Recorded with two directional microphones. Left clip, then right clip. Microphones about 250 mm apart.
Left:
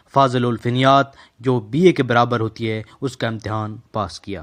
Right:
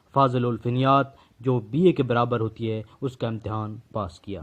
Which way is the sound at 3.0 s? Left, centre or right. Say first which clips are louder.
Left 6 dB; left.